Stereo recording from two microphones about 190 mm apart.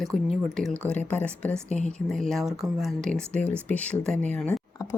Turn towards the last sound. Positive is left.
turn(degrees=10)  # may be behind; listen again after turning